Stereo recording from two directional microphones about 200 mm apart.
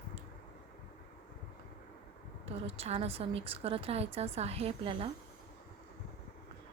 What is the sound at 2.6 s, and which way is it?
A woman's voice, 30° right (ahead or behind).